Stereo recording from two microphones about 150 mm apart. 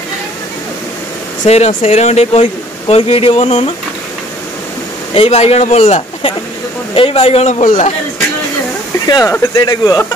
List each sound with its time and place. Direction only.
1.4 s speech: 50° left (ahead or behind)
5.1 s speech: 45° left (ahead or behind)
9.0 s speech: 25° left (ahead or behind)